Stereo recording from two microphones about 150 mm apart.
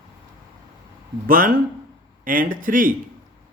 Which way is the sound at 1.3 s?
65° right (ahead or behind).